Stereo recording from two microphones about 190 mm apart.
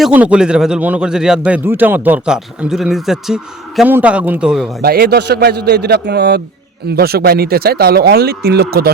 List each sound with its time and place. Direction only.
0.0 s speech: 5° right (ahead or behind)
4.8 s speech: 55° right (ahead or behind)